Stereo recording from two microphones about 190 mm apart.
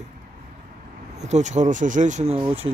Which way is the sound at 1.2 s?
40° right (ahead or behind).